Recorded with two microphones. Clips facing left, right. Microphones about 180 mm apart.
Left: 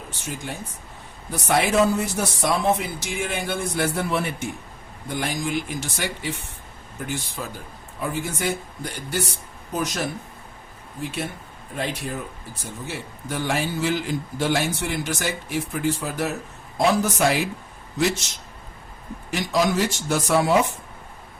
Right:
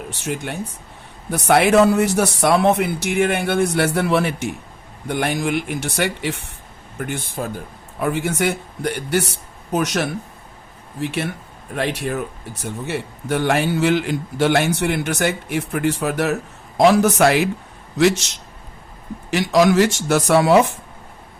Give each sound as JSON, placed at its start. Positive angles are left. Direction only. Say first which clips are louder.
{"t": 0.1, "sound": "a man's voice", "louder": "right 6 dB", "side_deg": -70}
{"t": 5.0, "sound": "a man's voice", "louder": "right 6 dB", "side_deg": -65}
{"t": 7.0, "sound": "speech", "louder": "right 5 dB", "side_deg": -55}
{"t": 8.0, "sound": "a man's voice", "louder": "right 6 dB", "side_deg": -70}